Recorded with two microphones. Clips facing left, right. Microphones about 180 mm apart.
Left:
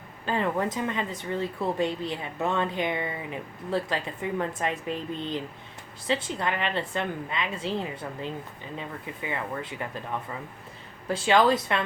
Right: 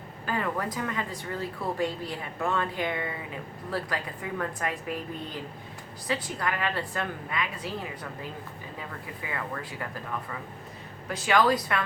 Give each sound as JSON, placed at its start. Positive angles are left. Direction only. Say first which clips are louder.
{"t": 0.3, "sound": "speech", "louder": "left 3 dB", "side_deg": 25}